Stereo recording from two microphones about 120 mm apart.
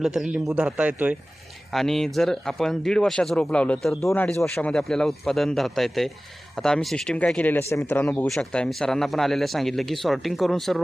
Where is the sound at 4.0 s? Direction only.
20° left (ahead or behind).